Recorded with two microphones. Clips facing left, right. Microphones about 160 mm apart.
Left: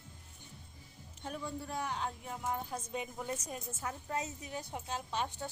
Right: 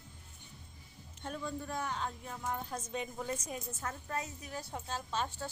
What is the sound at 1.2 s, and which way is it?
A woman's voice, 10° left (ahead or behind).